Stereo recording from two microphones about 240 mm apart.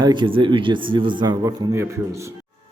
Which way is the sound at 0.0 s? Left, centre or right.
Centre.